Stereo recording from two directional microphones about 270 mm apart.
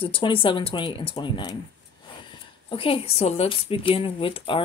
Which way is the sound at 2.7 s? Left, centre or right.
Centre.